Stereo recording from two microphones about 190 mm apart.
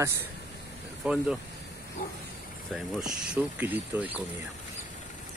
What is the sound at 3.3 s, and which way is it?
Speech, 10° right (ahead or behind).